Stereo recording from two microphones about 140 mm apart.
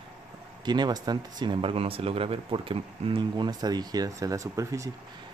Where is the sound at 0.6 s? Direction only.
30° right (ahead or behind).